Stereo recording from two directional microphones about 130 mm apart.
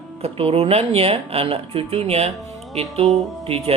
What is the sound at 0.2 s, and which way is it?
Speech, 50° right (ahead or behind).